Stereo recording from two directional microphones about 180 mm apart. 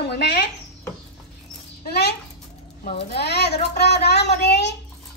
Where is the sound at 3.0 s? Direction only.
65° left (ahead or behind).